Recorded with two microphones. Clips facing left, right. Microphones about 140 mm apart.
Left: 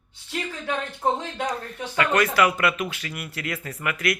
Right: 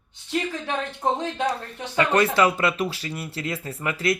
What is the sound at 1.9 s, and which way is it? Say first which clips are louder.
Speech: right 2 dB; 30° right (ahead or behind).